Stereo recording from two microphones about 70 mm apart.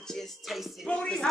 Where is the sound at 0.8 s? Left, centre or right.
Centre.